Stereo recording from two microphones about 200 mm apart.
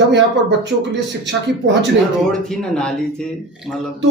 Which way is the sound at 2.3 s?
5° left (ahead or behind).